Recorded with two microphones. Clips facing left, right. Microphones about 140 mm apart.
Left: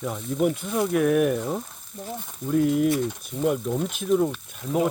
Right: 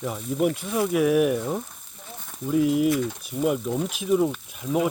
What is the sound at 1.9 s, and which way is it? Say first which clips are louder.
Speech: left 12 dB; 40° left (ahead or behind).